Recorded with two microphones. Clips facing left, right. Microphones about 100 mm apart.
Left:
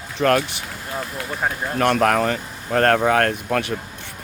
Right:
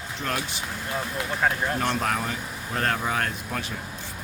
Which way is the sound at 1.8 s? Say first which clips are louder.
Left 14 dB; 65° left (ahead or behind).